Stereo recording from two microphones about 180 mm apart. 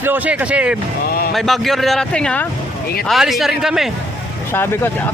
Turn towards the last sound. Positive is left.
turn(degrees=15)  # may be behind; listen again after turning